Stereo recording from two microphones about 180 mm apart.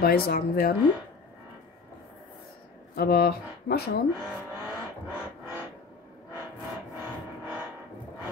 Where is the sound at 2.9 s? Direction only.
55° left (ahead or behind).